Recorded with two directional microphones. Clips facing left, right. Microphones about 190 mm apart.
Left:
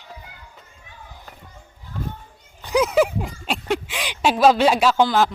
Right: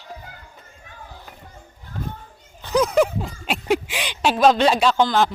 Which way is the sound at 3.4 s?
5° right (ahead or behind).